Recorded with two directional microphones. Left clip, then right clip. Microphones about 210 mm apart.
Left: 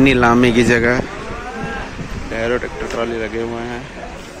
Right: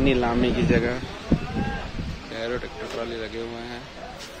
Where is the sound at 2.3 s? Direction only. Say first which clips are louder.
Left 10 dB; centre (ahead or behind).